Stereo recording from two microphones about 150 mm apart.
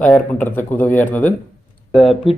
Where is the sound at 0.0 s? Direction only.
10° left (ahead or behind).